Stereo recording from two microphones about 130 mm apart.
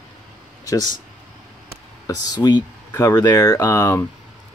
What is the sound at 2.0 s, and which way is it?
Speech, 30° left (ahead or behind).